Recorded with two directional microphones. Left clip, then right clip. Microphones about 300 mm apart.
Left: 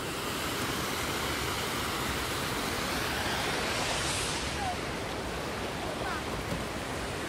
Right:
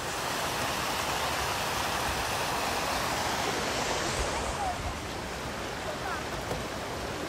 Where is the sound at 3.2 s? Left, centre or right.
Right.